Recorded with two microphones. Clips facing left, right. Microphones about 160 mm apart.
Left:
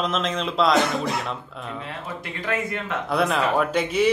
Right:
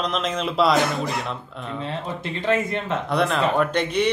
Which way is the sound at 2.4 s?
25° right (ahead or behind).